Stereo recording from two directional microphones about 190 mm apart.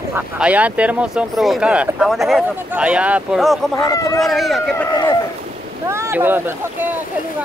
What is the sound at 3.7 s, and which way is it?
Speech, 20° left (ahead or behind).